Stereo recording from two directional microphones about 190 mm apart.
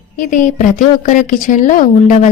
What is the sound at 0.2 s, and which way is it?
A woman's voice, 45° left (ahead or behind).